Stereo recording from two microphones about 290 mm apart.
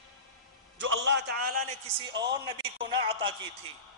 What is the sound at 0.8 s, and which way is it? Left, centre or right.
Speech, right.